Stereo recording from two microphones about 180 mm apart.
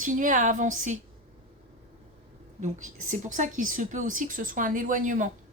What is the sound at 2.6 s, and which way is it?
A woman's voice, 40° right (ahead or behind).